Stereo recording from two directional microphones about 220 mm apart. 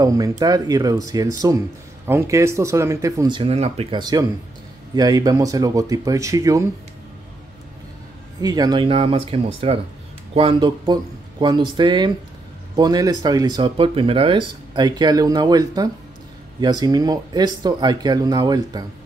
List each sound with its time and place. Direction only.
0.0 s speech: 15° right (ahead or behind)
8.4 s speech: 15° right (ahead or behind)